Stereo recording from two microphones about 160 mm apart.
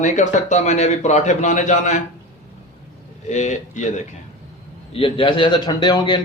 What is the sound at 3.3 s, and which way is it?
Speech, 50° left (ahead or behind).